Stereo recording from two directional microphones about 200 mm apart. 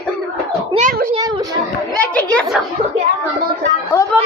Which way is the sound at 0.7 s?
40° right (ahead or behind).